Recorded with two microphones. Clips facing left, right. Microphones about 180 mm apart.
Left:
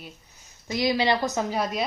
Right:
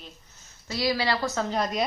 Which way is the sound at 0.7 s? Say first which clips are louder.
Left 3 dB; 20° left (ahead or behind).